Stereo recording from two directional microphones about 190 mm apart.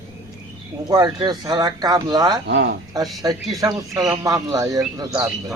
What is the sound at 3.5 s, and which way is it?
Speech, 20° right (ahead or behind).